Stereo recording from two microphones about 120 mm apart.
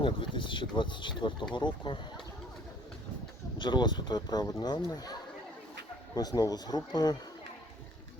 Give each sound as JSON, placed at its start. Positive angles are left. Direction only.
{"t": 0.0, "sound": "speech", "side_deg": 45}
{"t": 3.6, "sound": "speech", "side_deg": 40}
{"t": 6.1, "sound": "speech", "side_deg": 30}